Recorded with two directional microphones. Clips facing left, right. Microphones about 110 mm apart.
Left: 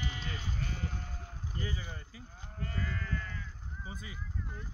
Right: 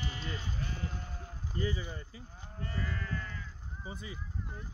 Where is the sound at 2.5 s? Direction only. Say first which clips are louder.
Even; 30° right (ahead or behind).